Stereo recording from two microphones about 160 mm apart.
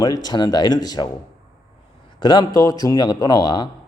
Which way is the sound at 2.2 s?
25° left (ahead or behind).